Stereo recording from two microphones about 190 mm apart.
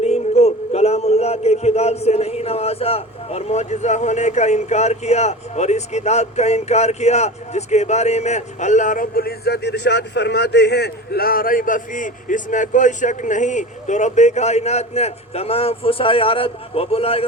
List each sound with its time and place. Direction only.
0.0 s speech: 35° left (ahead or behind)